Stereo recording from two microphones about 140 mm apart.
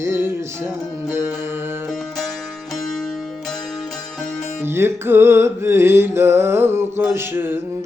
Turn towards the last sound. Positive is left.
turn(degrees=-15)  # may be behind; listen again after turning